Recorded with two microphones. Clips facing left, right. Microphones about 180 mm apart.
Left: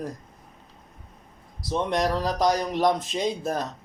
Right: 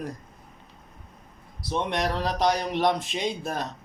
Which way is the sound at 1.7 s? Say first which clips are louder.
Left 3 dB; 40° left (ahead or behind).